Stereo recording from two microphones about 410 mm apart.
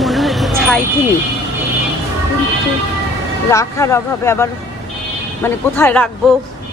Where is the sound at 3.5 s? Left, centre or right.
Centre.